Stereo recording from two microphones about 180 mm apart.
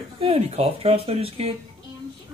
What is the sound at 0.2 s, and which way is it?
Speech, 35° right (ahead or behind).